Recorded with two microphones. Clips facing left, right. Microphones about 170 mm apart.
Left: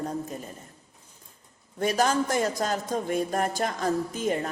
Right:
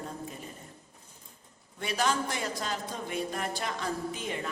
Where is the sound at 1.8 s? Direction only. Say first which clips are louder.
Left 6 dB; 45° left (ahead or behind).